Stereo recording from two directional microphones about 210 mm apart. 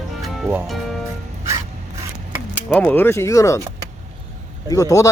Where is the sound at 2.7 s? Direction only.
10° left (ahead or behind).